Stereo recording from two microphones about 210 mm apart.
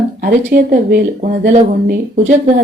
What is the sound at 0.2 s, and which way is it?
Speech, 40° right (ahead or behind).